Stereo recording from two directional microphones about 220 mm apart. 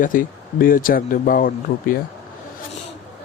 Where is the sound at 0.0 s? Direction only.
40° left (ahead or behind).